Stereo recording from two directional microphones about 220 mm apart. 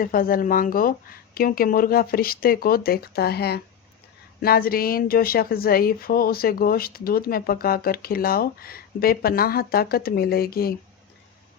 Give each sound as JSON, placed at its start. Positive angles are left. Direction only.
{"t": 0.0, "sound": "speech", "side_deg": 40}